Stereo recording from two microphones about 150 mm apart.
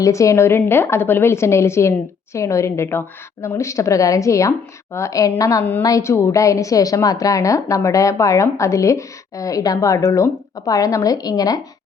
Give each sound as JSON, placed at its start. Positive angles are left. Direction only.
{"t": 0.0, "sound": "a woman's voice", "side_deg": 20}